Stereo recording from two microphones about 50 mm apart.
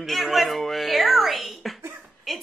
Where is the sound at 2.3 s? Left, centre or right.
Centre.